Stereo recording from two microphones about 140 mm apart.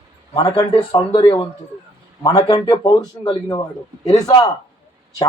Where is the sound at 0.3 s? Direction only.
40° left (ahead or behind).